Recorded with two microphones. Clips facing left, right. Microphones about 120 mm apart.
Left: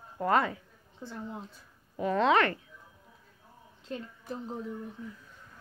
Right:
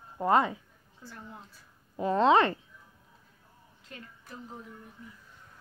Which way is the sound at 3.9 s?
30° left (ahead or behind).